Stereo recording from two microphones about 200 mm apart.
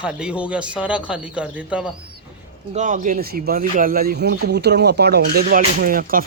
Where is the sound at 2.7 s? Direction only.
40° right (ahead or behind).